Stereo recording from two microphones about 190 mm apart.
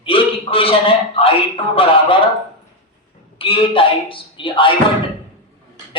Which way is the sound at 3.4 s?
30° left (ahead or behind).